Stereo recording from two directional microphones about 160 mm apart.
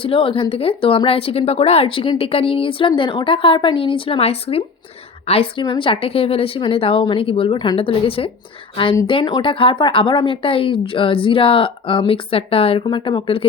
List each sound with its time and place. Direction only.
0.0 s speech: 35° left (ahead or behind)